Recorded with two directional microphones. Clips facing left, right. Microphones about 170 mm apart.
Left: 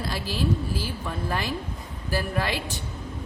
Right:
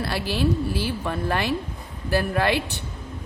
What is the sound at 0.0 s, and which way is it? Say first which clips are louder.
A woman's voice: right 4 dB; 65° right (ahead or behind).